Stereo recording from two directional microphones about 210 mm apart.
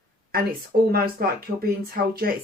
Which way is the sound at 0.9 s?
45° right (ahead or behind).